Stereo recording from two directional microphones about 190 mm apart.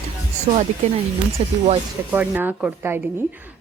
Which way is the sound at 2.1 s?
10° right (ahead or behind).